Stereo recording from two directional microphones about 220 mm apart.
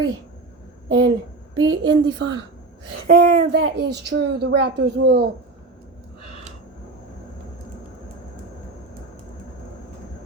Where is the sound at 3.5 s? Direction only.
50° right (ahead or behind).